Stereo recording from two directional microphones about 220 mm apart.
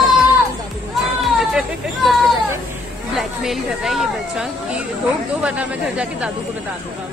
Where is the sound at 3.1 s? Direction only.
Centre (ahead or behind).